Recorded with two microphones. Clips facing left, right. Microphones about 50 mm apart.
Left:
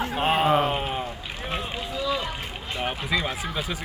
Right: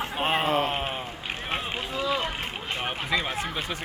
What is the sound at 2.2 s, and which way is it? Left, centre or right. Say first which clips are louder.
Boat: right 1 dB; right.